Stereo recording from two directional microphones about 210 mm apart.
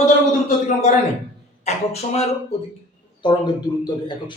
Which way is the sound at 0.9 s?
35° left (ahead or behind).